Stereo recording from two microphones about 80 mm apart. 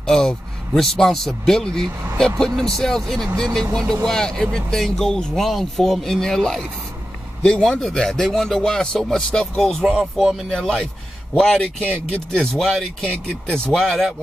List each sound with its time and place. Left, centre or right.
0.0 s speech: centre